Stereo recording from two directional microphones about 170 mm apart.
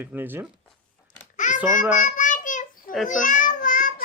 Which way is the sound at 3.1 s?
50° left (ahead or behind).